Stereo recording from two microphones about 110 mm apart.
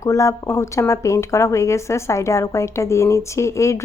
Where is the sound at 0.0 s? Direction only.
30° left (ahead or behind).